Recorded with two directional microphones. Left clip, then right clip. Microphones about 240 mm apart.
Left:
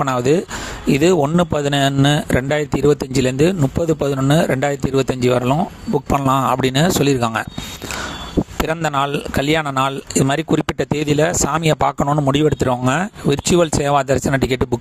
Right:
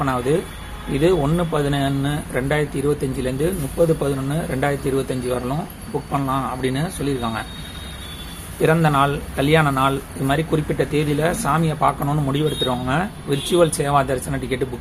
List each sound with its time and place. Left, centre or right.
0.0 s speech: left
8.6 s speech: left